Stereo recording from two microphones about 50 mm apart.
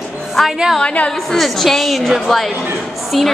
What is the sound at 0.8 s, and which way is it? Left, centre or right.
Speech, left.